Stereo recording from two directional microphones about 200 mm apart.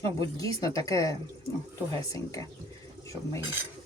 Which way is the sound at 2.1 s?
15° left (ahead or behind).